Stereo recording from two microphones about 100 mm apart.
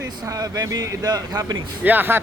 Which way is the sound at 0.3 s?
35° right (ahead or behind).